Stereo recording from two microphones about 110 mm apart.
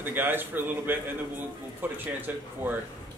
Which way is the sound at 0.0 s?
20° right (ahead or behind).